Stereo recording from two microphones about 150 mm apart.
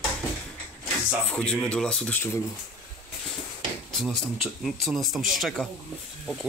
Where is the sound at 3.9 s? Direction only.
Centre (ahead or behind).